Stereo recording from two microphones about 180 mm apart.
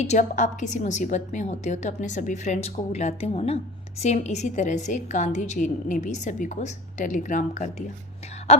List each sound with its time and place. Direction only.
0.0 s a woman's voice: 40° left (ahead or behind)